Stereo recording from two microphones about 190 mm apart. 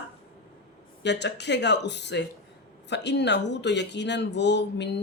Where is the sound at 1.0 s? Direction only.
65° left (ahead or behind).